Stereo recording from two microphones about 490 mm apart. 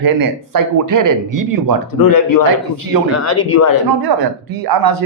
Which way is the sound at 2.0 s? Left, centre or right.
Left.